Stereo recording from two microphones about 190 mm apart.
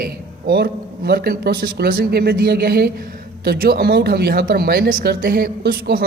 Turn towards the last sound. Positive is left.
turn(degrees=-50)  # may be behind; listen again after turning